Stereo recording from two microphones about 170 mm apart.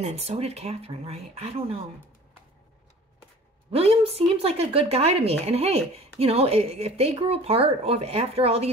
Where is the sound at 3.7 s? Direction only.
35° right (ahead or behind).